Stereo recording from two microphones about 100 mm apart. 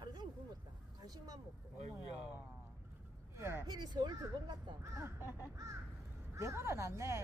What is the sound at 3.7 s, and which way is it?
Speech, 45° right (ahead or behind).